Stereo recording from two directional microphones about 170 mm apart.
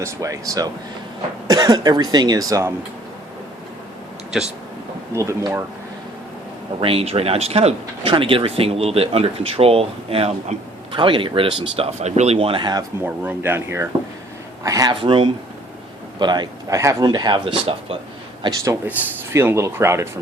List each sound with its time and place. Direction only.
0.0 s a man's voice: 20° right (ahead or behind)
5.1 s speech: 20° right (ahead or behind)
6.7 s speech: 35° right (ahead or behind)
13.0 s a man's voice: 10° right (ahead or behind); by 17.9 s 30° right (ahead or behind)
18.4 s speech: 20° right (ahead or behind)